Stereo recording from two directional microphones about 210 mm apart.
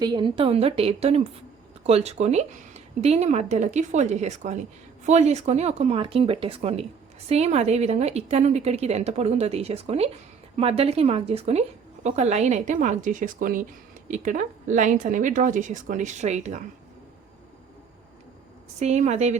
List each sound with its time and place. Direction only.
0.0 s a woman's voice: 20° right (ahead or behind)
18.8 s a woman's voice: 30° right (ahead or behind)